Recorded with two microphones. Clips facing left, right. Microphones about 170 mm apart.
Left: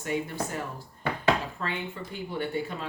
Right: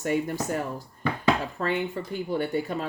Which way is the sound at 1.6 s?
45° right (ahead or behind).